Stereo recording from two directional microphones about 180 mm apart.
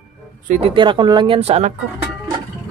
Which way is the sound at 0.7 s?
25° right (ahead or behind).